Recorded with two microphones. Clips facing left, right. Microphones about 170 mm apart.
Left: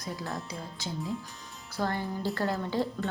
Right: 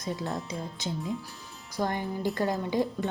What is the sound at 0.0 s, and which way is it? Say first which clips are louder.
A woman's voice: right 4 dB; 20° right (ahead or behind).